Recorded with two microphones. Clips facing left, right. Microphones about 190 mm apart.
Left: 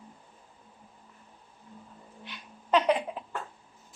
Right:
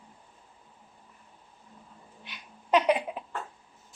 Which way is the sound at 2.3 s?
15° right (ahead or behind).